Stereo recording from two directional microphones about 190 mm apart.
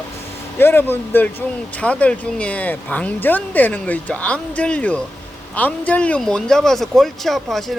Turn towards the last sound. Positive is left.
turn(degrees=0)  # may be behind; listen again after turning